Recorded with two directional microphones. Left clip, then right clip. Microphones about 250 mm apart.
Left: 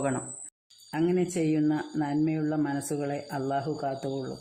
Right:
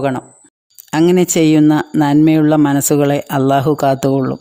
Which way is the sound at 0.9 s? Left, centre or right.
Right.